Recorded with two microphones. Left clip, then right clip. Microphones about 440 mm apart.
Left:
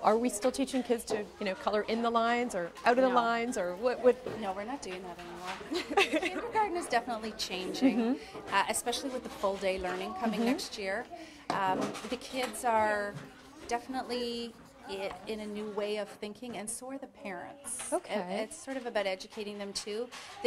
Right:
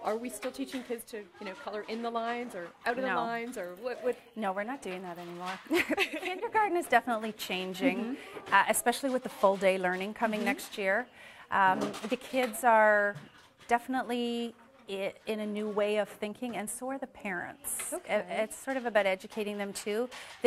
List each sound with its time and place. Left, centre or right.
0.0 s speech: left
4.4 s a woman's voice: right
5.7 s speech: right
5.9 s speech: left
6.5 s a woman's voice: right